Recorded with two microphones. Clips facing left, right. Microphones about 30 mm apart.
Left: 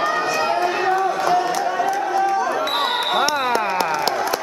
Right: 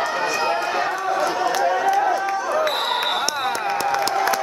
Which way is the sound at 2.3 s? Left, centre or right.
Centre.